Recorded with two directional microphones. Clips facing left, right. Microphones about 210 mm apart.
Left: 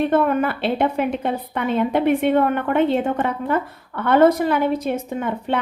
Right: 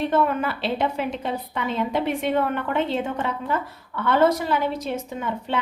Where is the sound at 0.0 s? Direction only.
55° left (ahead or behind).